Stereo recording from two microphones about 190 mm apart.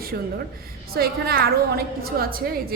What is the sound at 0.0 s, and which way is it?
A woman's voice, 50° right (ahead or behind).